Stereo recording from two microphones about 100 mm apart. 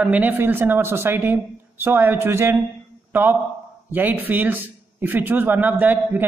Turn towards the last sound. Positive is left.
turn(degrees=-20)  # may be behind; listen again after turning